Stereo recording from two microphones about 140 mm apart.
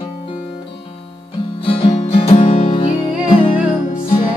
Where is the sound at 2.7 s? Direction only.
35° left (ahead or behind).